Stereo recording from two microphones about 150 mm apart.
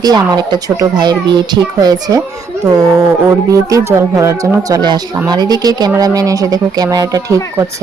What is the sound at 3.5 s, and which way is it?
Speech, 20° right (ahead or behind).